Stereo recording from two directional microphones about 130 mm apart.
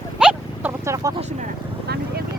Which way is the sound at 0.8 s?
20° right (ahead or behind).